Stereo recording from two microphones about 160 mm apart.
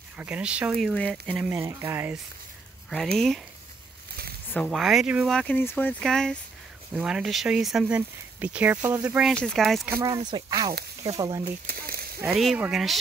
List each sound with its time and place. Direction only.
0.2 s speech: 5° right (ahead or behind)
1.3 s speech: 10° right (ahead or behind)
3.2 s speech: centre (ahead or behind)
4.6 s speech: centre (ahead or behind)
5.3 s speech: 5° left (ahead or behind)
9.3 s speech: 5° left (ahead or behind)
9.8 s speech: 15° right (ahead or behind)
10.1 s speech: 30° right (ahead or behind)
11.7 s a sound: 75° right (ahead or behind)
12.5 s speech: 5° right (ahead or behind)